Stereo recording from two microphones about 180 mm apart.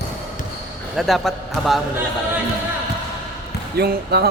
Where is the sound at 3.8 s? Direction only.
60° right (ahead or behind).